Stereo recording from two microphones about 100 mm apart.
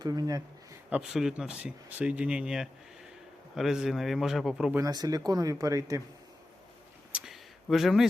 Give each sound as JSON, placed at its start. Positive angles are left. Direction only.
{"t": 0.0, "sound": "speech", "side_deg": -40}
{"t": 0.9, "sound": "a man's voice", "side_deg": -10}
{"t": 4.8, "sound": "speech", "side_deg": -40}
{"t": 7.1, "sound": "a sound", "side_deg": 0}